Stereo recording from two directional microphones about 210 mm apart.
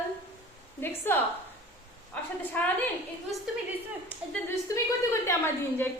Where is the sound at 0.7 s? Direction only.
10° left (ahead or behind).